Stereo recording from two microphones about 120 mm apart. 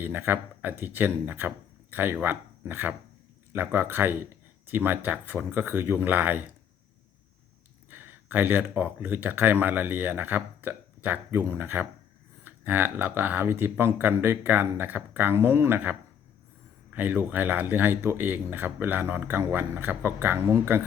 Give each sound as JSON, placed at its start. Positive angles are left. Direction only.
{"t": 0.0, "sound": "speech", "side_deg": -15}
{"t": 7.9, "sound": "speech", "side_deg": -15}